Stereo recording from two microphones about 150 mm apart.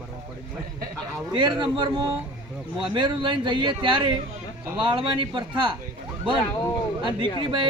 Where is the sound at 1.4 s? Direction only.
30° right (ahead or behind).